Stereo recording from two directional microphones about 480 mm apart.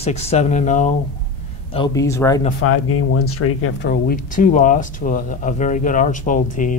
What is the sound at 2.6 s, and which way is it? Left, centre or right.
Speech, left.